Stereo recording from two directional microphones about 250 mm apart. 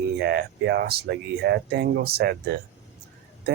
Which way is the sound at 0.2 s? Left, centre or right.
Right.